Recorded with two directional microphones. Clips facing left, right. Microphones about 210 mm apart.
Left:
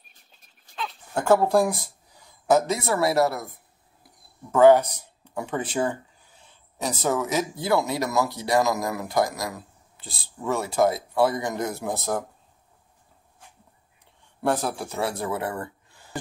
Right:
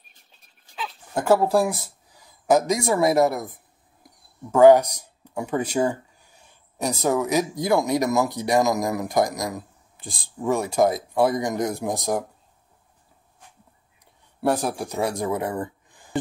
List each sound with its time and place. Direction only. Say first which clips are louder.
0.7 s speech: right 1 dB; 5° right (ahead or behind)
2.5 s speech: right 2 dB; 10° right (ahead or behind)
14.4 s speech: right 2 dB; 10° right (ahead or behind)